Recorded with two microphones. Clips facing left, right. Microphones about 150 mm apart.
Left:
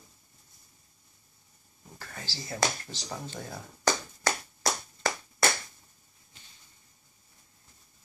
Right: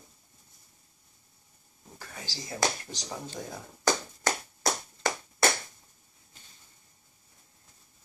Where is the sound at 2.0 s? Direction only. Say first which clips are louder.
Even; 15° right (ahead or behind).